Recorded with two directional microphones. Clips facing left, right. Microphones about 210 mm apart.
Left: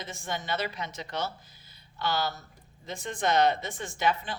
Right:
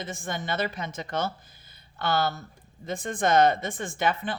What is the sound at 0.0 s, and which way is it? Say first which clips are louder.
Speech: right 3 dB; 50° right (ahead or behind).